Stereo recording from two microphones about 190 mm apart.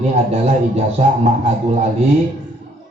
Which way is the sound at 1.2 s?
35° right (ahead or behind).